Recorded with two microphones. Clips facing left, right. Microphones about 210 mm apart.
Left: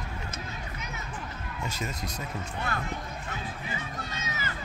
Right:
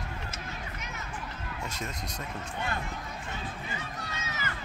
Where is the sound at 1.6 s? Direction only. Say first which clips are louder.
Left 3 dB; centre (ahead or behind).